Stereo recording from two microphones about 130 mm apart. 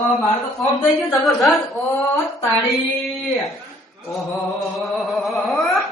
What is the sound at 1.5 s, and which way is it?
Speech, 25° left (ahead or behind).